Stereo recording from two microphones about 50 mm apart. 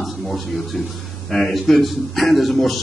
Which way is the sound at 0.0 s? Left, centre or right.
Centre.